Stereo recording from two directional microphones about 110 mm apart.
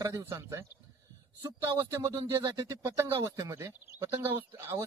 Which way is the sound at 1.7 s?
35° right (ahead or behind).